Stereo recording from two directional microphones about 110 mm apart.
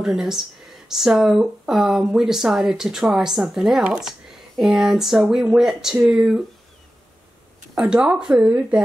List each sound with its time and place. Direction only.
0.0 s speech: 5° right (ahead or behind)
7.9 s speech: 10° right (ahead or behind)